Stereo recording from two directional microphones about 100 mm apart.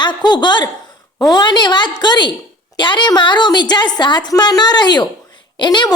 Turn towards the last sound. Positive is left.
turn(degrees=50)  # may be behind; listen again after turning